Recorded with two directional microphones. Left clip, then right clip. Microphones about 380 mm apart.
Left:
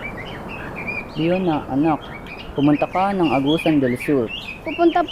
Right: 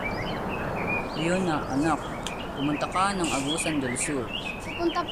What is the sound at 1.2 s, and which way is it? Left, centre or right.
Speech, centre.